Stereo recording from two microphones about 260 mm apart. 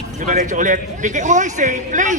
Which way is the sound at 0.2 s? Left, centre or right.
Right.